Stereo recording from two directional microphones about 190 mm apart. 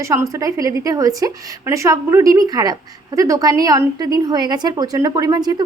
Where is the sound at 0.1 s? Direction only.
15° right (ahead or behind).